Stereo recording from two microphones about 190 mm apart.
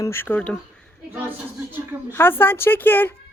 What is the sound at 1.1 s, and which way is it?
Speech, 10° right (ahead or behind).